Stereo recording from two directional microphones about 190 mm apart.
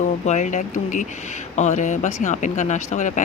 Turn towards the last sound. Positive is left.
turn(degrees=40)  # may be behind; listen again after turning